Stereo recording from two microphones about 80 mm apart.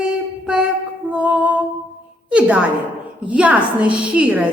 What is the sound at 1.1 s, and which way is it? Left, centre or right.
Music, centre.